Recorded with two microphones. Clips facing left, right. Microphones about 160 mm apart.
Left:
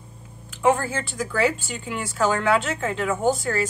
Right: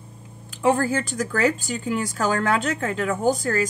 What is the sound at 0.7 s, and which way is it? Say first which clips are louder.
A woman's voice: right 1 dB; 40° right (ahead or behind).